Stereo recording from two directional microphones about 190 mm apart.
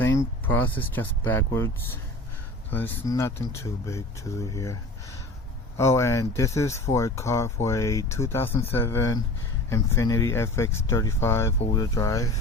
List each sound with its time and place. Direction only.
0.0 s speech: 15° left (ahead or behind)